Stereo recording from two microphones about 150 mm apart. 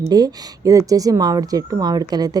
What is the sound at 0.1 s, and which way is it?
Speech, 25° right (ahead or behind).